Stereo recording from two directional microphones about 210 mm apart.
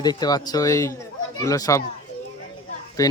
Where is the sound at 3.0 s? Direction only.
15° left (ahead or behind).